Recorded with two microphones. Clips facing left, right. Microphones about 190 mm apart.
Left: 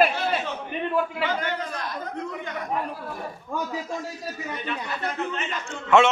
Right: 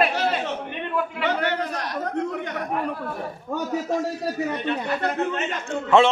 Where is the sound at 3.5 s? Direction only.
70° right (ahead or behind).